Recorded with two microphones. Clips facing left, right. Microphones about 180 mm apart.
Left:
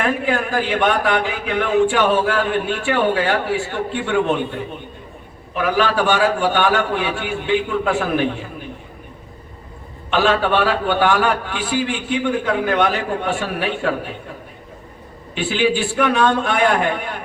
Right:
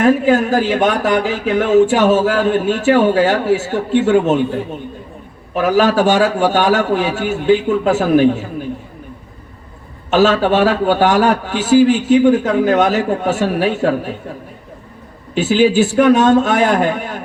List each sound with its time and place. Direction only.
0.0 s a man's voice: 40° right (ahead or behind)
10.1 s a man's voice: 40° right (ahead or behind)
15.4 s a man's voice: 40° right (ahead or behind)